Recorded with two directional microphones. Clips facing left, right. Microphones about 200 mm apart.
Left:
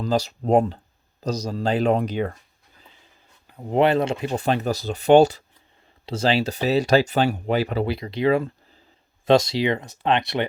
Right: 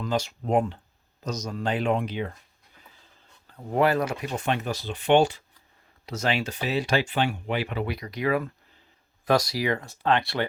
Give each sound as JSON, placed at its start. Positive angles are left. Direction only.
{"t": 0.0, "sound": "speech", "side_deg": 35}
{"t": 3.4, "sound": "speech", "side_deg": 20}